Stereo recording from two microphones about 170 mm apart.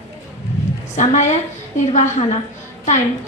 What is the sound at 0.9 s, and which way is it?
A woman's voice, 45° left (ahead or behind).